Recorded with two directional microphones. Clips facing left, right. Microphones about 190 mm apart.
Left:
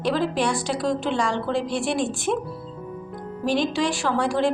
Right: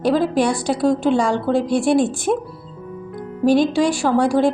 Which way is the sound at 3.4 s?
45° right (ahead or behind).